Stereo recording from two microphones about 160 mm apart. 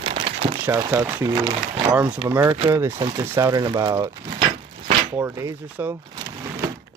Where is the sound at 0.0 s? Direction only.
35° right (ahead or behind).